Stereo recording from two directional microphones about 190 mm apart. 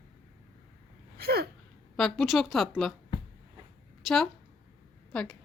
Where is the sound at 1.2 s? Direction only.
55° right (ahead or behind).